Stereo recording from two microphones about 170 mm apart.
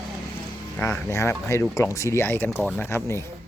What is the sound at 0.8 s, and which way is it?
Speech, 10° left (ahead or behind).